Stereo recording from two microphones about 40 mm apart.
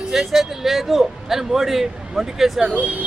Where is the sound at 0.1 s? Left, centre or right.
Centre.